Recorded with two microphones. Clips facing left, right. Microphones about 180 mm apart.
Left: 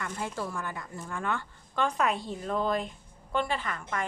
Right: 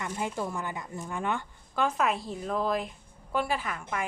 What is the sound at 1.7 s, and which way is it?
A woman's voice, 5° right (ahead or behind).